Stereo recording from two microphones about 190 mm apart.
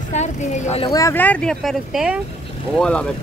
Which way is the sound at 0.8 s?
15° left (ahead or behind).